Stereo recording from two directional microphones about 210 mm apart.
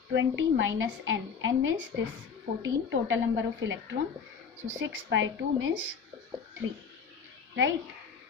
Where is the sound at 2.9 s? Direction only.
60° right (ahead or behind).